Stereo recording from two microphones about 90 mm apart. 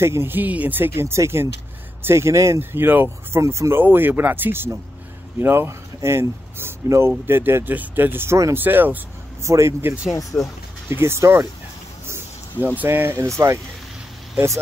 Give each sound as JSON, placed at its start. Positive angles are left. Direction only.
{"t": 0.0, "sound": "speech", "side_deg": -30}
{"t": 3.8, "sound": "speech", "side_deg": -20}
{"t": 9.4, "sound": "speech", "side_deg": -35}
{"t": 10.3, "sound": "speech", "side_deg": 15}
{"t": 10.9, "sound": "speech", "side_deg": -30}
{"t": 12.6, "sound": "speech", "side_deg": -20}